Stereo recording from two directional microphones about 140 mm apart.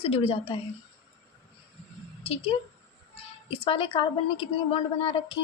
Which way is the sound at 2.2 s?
45° left (ahead or behind).